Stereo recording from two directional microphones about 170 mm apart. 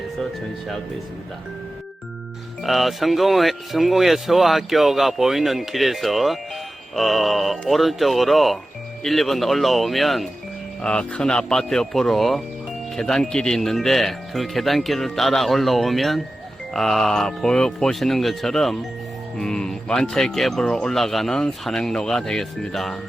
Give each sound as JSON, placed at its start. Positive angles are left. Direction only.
{"t": 2.6, "sound": "speech", "side_deg": 0}